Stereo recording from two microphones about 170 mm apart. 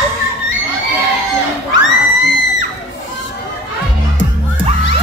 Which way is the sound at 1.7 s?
90° left.